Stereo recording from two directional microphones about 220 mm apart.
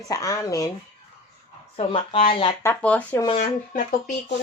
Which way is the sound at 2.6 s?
10° left (ahead or behind).